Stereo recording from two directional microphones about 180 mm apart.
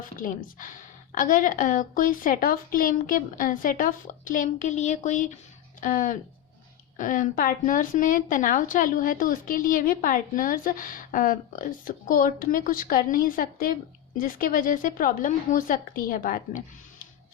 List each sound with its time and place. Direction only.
0.0 s a woman's voice: 50° left (ahead or behind)